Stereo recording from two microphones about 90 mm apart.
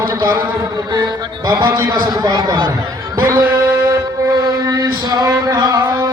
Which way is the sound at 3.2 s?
20° right (ahead or behind).